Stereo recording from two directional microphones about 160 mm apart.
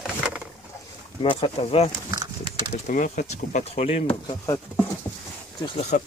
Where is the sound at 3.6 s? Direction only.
40° left (ahead or behind).